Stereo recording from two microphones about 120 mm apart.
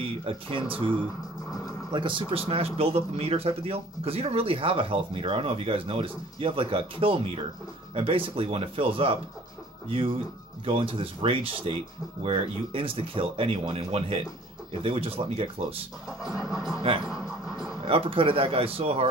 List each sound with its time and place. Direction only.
0.1 s speech: 50° right (ahead or behind)
1.9 s speech: 40° right (ahead or behind)
16.1 s music: 5° right (ahead or behind)
17.8 s speech: 50° right (ahead or behind)